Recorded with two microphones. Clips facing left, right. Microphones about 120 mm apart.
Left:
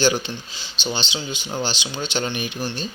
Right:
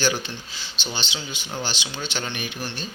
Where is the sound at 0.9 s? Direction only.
20° left (ahead or behind).